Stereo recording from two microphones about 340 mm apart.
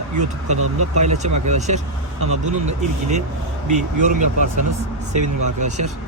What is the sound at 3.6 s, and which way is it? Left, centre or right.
Speech, right.